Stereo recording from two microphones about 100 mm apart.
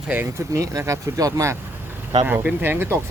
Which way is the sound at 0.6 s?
30° right (ahead or behind).